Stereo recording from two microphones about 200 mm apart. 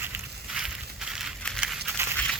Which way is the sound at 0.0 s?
5° right (ahead or behind).